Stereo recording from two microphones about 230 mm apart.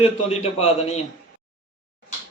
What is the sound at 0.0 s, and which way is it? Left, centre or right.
A man's voice, left.